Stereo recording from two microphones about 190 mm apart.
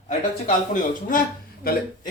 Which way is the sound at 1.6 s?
50° left (ahead or behind).